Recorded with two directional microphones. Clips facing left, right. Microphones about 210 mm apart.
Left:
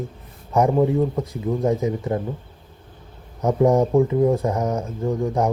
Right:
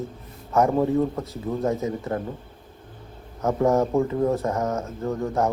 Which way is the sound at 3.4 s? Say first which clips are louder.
Left 3 dB; 15° left (ahead or behind).